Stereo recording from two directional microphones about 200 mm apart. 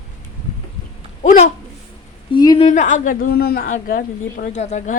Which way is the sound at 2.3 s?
20° left (ahead or behind).